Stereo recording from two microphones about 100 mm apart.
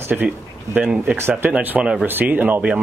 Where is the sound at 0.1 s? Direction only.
10° right (ahead or behind).